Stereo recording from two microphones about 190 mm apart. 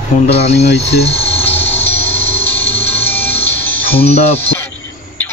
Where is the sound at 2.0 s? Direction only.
30° left (ahead or behind).